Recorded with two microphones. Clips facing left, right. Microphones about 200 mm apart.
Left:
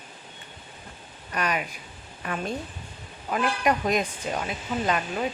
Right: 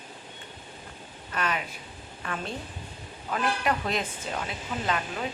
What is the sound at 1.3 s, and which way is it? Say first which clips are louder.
Speech: left 2 dB; 15° left (ahead or behind).